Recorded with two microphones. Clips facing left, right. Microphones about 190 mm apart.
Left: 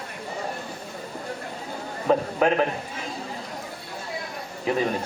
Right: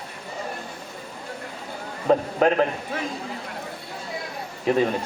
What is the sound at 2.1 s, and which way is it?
Speech, 35° right (ahead or behind).